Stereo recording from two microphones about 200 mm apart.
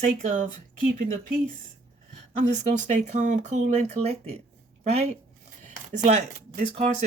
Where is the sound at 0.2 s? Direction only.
40° right (ahead or behind).